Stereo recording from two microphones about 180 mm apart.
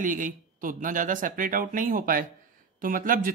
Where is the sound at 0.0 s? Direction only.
45° right (ahead or behind).